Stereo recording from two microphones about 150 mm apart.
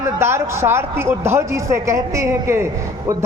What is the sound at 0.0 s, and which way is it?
A man's voice, 15° right (ahead or behind).